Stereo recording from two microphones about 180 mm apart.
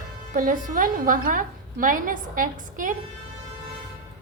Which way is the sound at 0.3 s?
50° right (ahead or behind).